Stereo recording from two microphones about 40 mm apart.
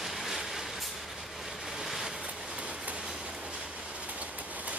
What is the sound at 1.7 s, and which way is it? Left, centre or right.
Boat, centre.